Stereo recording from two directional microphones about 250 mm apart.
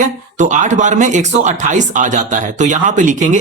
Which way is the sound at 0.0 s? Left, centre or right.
Right.